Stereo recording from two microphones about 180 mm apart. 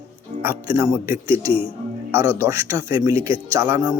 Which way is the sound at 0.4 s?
15° right (ahead or behind).